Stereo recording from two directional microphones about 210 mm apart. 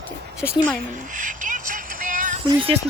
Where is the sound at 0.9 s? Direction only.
35° right (ahead or behind).